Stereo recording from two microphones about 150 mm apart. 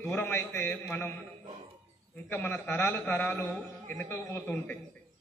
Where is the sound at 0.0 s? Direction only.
15° left (ahead or behind).